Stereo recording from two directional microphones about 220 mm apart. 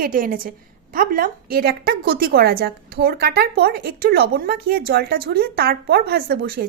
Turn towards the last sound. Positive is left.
turn(degrees=-45)  # may be behind; listen again after turning